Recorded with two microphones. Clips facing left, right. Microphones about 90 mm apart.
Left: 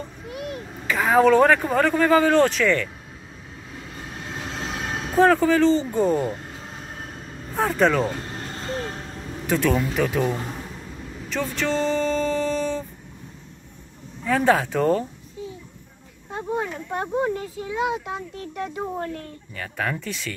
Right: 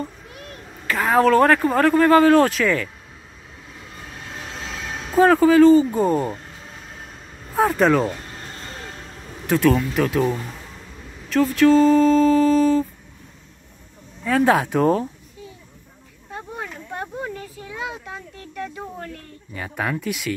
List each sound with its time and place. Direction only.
0.8 s speech: centre (ahead or behind)
5.1 s speech: 5° right (ahead or behind)
7.5 s speech: 5° right (ahead or behind)
9.5 s speech: centre (ahead or behind)
10.2 s a man's voice: 25° left (ahead or behind)
11.2 s speech: 5° right (ahead or behind)
14.4 s speech: 10° right (ahead or behind)
16.5 s a sound: 25° left (ahead or behind)
19.5 s speech: 10° right (ahead or behind)